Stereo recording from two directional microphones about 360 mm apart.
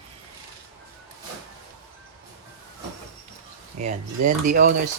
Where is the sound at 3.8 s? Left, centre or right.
Centre.